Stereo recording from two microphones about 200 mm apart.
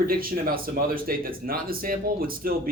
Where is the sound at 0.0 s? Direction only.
45° right (ahead or behind).